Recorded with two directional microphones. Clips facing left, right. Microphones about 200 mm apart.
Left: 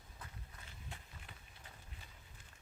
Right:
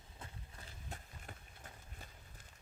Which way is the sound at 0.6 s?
40° right (ahead or behind).